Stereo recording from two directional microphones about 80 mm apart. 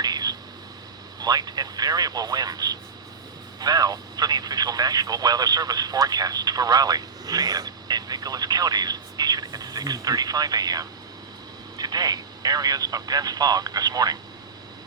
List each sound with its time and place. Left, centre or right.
0.0 s whispering: right
1.2 s speech: right